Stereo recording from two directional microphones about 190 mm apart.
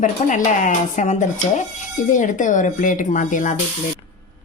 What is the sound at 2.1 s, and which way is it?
Speech, 40° left (ahead or behind).